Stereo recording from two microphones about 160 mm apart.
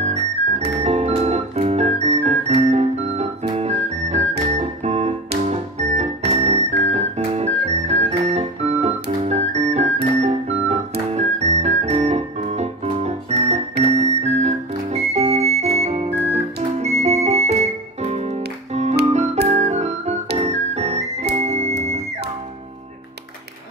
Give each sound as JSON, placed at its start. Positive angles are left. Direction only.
{"t": 0.8, "sound": "music", "side_deg": -45}
{"t": 13.8, "sound": "whistle", "side_deg": -45}
{"t": 16.7, "sound": "music", "side_deg": -45}